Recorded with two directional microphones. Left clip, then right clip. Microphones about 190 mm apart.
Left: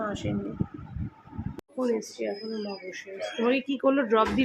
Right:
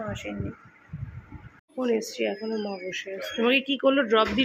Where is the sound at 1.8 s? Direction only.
25° right (ahead or behind).